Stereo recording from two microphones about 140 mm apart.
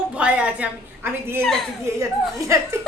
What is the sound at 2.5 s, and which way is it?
Speech, 20° right (ahead or behind).